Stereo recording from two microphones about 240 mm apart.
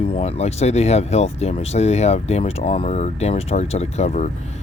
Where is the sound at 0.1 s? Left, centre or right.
Left.